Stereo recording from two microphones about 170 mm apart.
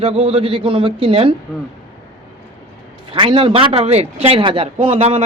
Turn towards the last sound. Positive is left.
turn(degrees=-35)  # may be behind; listen again after turning